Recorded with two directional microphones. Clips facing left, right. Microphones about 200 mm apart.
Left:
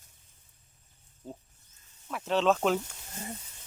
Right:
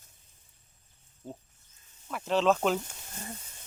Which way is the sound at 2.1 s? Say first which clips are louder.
Even; centre (ahead or behind).